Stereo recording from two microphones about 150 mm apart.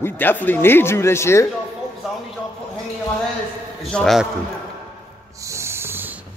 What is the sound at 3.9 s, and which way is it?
Speech, centre (ahead or behind).